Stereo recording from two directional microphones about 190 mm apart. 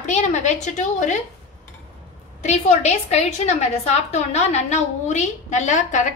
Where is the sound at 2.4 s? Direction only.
35° left (ahead or behind).